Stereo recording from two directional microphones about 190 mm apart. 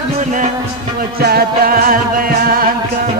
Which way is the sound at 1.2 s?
50° right (ahead or behind).